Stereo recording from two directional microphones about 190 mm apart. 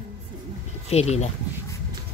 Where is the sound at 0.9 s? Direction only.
35° left (ahead or behind).